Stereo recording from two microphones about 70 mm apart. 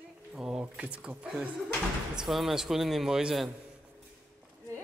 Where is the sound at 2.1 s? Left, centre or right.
Centre.